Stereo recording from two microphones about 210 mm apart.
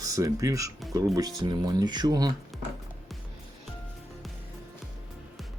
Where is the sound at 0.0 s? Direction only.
15° right (ahead or behind).